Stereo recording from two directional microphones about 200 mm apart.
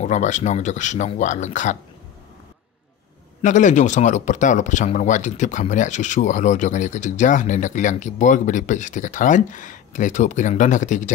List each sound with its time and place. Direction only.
0.0 s speech: 35° left (ahead or behind)
3.4 s speech: 40° left (ahead or behind)